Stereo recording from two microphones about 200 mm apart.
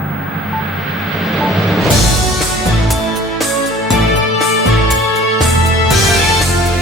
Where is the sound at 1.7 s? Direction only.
Centre (ahead or behind).